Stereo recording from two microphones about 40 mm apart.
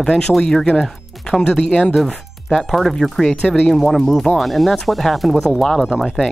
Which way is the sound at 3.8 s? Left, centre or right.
Centre.